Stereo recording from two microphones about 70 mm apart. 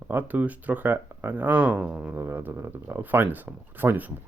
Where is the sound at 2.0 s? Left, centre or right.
Right.